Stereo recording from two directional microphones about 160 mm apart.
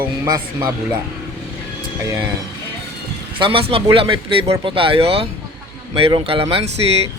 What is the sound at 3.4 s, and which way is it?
Speech, 35° right (ahead or behind).